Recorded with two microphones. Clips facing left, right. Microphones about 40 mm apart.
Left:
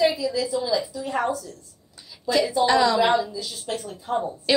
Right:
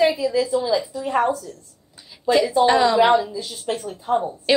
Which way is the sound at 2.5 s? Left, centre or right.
Right.